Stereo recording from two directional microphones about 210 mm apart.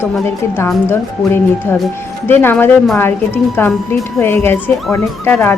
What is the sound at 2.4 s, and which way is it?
A woman's voice, 10° left (ahead or behind).